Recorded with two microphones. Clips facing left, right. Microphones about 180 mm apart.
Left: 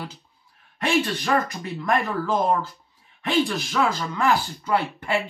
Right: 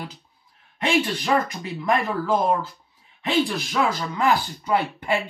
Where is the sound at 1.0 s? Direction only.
15° right (ahead or behind).